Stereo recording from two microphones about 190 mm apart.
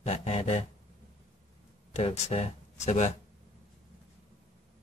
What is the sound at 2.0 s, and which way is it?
Speech, 35° left (ahead or behind).